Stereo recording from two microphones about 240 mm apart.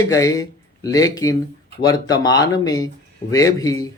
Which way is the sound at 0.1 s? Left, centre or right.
Centre.